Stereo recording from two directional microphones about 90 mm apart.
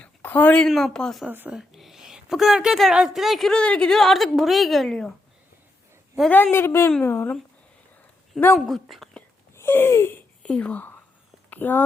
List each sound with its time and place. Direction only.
0.0 s a sound: 20° left (ahead or behind)
0.7 s a woman's voice: centre (ahead or behind)
1.3 s speech: 20° right (ahead or behind)
1.5 s a woman's voice: 5° right (ahead or behind)
6.3 s speech: 25° left (ahead or behind)
8.5 s speech: centre (ahead or behind)
9.6 s a sound: 25° left (ahead or behind)
10.4 s speech: 15° left (ahead or behind)